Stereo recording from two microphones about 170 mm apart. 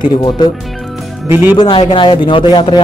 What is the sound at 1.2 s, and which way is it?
Speech, 15° right (ahead or behind).